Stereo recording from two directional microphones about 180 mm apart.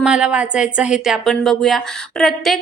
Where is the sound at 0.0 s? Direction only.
5° right (ahead or behind).